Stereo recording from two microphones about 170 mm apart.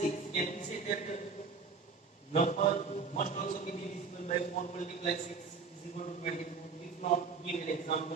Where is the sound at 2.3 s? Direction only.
45° left (ahead or behind).